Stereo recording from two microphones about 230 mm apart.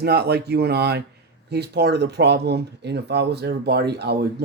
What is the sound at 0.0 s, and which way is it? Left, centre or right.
Speech, right.